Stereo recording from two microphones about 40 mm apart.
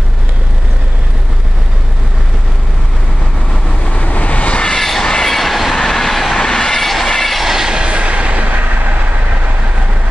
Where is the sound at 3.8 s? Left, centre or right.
Left.